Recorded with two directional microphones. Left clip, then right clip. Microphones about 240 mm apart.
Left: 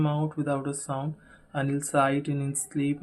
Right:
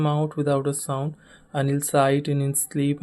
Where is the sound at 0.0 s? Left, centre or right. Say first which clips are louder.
Right 5 dB; right.